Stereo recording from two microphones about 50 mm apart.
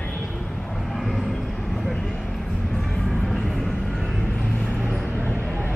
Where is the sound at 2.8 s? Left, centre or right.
Centre.